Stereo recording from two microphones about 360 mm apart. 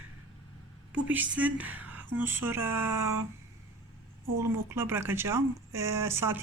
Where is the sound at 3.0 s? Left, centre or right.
Right.